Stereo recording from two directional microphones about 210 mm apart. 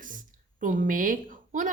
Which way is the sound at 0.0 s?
40° right (ahead or behind).